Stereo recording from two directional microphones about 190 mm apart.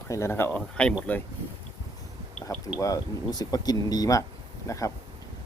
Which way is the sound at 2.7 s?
15° left (ahead or behind).